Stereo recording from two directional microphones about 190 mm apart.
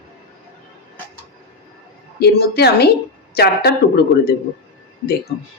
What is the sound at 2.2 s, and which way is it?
Speech, 60° left (ahead or behind).